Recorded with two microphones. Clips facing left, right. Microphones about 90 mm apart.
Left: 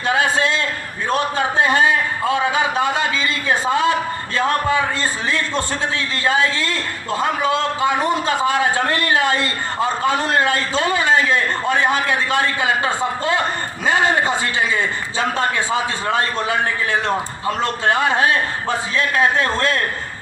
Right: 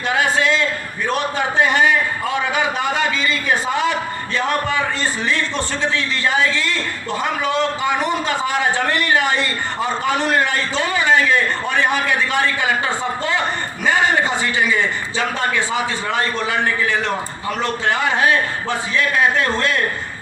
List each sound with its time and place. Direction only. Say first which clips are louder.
3.2 s a man's voice: even; 40° left (ahead or behind)
10.8 s a man's voice: right 1 dB; 25° left (ahead or behind)
13.9 s a man's voice: left 1 dB; 20° left (ahead or behind); by 19.8 s 40° left (ahead or behind)